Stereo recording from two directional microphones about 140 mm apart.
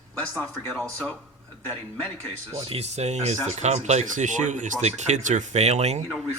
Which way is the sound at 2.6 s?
45° right (ahead or behind).